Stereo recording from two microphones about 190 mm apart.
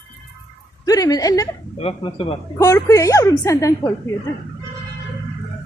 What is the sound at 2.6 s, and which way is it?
Speech, 15° left (ahead or behind).